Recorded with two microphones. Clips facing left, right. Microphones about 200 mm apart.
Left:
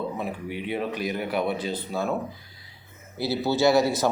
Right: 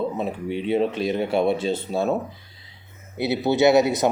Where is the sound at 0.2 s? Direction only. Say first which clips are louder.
Right 5 dB; 25° right (ahead or behind).